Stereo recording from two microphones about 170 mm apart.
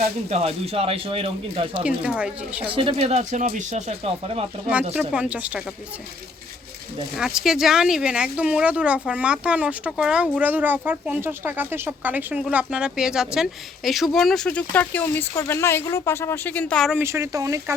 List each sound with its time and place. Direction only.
0.0 s speech: 35° right (ahead or behind)
1.7 s speech: 5° right (ahead or behind)
2.6 s speech: 30° right (ahead or behind)
4.9 s speech: 5° right (ahead or behind)
7.2 s speech: centre (ahead or behind)
16.9 s speech: 15° right (ahead or behind)